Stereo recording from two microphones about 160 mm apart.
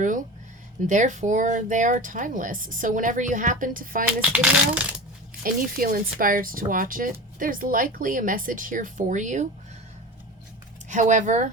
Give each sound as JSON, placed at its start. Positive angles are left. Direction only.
{"t": 0.9, "sound": "speech", "side_deg": -50}
{"t": 4.2, "sound": "speech", "side_deg": -10}
{"t": 5.4, "sound": "speech", "side_deg": -65}
{"t": 10.8, "sound": "speech", "side_deg": -50}